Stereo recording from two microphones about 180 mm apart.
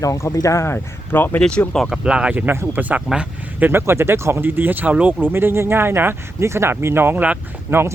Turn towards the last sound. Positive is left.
turn(degrees=-10)  # may be behind; listen again after turning